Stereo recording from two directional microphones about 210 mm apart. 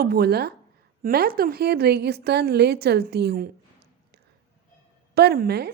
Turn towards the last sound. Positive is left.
turn(degrees=-50)  # may be behind; listen again after turning